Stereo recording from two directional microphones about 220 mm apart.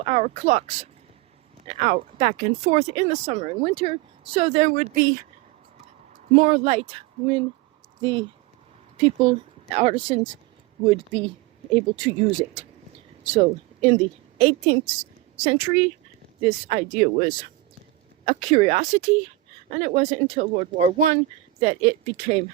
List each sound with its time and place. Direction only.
0.0 s speech: 30° right (ahead or behind)
6.1 s a woman's voice: 35° right (ahead or behind)
9.0 s speech: 25° right (ahead or behind)
13.3 s a woman's voice: 30° right (ahead or behind)